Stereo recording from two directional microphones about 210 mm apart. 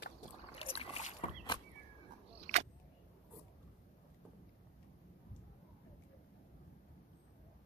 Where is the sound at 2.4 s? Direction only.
30° right (ahead or behind).